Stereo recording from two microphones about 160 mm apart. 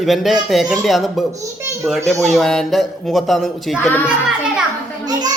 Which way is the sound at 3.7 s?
15° left (ahead or behind).